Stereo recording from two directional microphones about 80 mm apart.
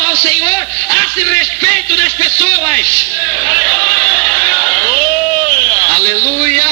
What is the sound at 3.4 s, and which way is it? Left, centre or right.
Speech, left.